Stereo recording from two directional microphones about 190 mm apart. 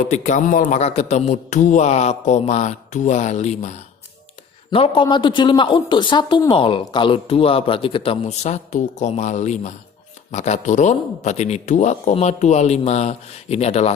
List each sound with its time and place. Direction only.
0.1 s a man's voice: 40° left (ahead or behind)